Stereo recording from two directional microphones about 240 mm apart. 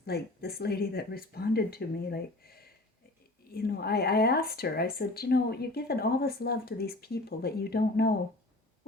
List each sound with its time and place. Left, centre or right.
0.0 s speech: left